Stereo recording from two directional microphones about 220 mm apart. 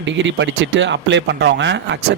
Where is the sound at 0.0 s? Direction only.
55° right (ahead or behind).